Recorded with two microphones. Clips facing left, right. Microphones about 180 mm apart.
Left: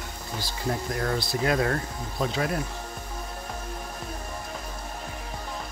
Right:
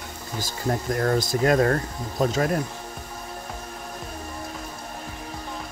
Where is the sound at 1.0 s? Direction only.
45° right (ahead or behind).